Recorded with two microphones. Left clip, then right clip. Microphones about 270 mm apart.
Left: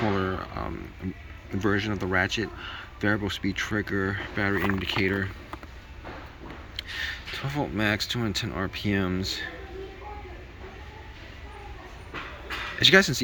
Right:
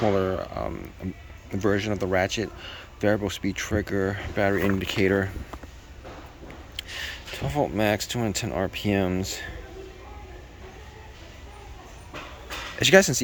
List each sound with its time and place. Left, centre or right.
0.2 s a sound: centre
1.5 s speech: centre
6.7 s speech: centre
12.8 s speech: centre